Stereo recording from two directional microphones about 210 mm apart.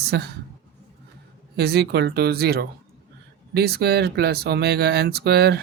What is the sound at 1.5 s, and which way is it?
Speech, 50° right (ahead or behind).